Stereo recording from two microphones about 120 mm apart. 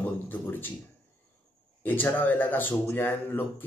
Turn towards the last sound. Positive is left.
turn(degrees=20)  # may be behind; listen again after turning